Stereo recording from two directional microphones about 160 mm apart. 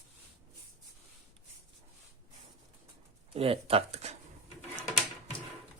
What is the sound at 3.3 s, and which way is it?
Speech, 35° right (ahead or behind).